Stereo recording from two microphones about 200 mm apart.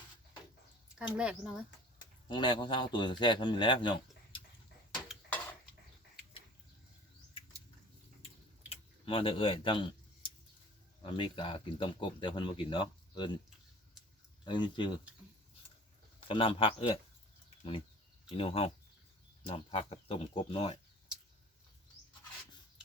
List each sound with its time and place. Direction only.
0.9 s speech: 5° right (ahead or behind)
2.3 s speech: 25° left (ahead or behind)
5.0 s dishes: 5° left (ahead or behind)
8.7 s a sound: 25° left (ahead or behind)
11.0 s speech: 25° left (ahead or behind)
14.4 s speech: 25° left (ahead or behind)
16.2 s speech: 25° left (ahead or behind)
17.6 s bird flight: 25° left (ahead or behind)
18.3 s speech: 30° left (ahead or behind)